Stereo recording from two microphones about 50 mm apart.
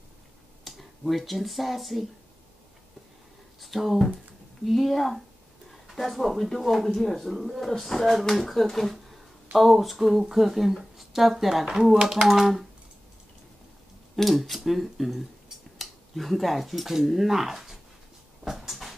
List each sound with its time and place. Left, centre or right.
0.7 s speech: centre
3.6 s speech: centre
14.1 s speech: centre
18.4 s a sound: centre